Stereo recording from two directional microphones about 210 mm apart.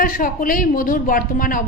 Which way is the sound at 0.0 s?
40° left (ahead or behind).